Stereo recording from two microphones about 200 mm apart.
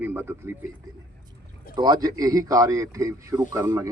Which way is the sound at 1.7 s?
20° right (ahead or behind).